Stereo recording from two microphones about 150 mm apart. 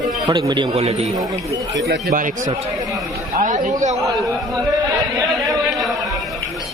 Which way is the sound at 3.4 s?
55° right (ahead or behind).